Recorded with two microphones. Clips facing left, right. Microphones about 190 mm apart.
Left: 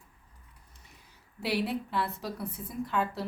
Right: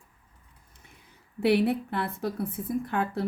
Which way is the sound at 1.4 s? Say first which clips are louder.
Right 8 dB; 60° right (ahead or behind).